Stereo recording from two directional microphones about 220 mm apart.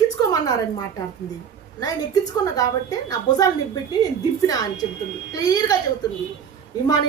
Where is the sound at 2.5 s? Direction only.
15° left (ahead or behind).